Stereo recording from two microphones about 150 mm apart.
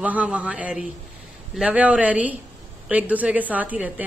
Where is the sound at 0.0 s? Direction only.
10° right (ahead or behind).